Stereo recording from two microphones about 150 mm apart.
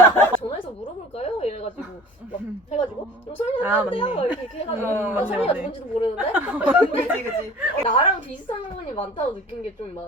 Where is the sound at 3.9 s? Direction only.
35° left (ahead or behind).